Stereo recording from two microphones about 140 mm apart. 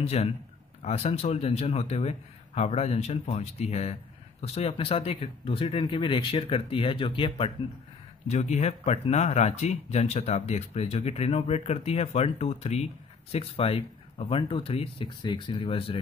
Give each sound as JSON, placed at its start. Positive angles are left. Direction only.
{"t": 0.0, "sound": "speech", "side_deg": 50}
{"t": 8.3, "sound": "speech", "side_deg": 55}